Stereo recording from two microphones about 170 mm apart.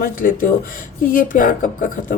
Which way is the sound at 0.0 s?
55° left (ahead or behind).